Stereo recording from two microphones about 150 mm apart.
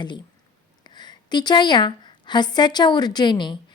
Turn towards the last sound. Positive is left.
turn(degrees=30)  # may be behind; listen again after turning